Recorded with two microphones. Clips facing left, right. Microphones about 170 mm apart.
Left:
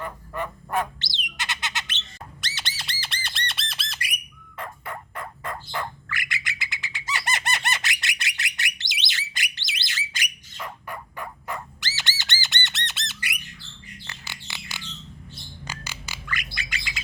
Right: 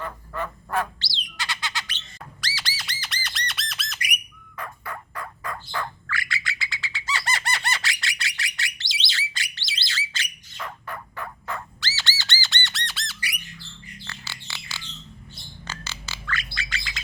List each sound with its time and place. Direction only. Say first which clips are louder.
0.0 s bird: even; 15° left (ahead or behind)
4.5 s turkey: even; 25° left (ahead or behind)
14.0 s bird: right 1 dB; 20° left (ahead or behind)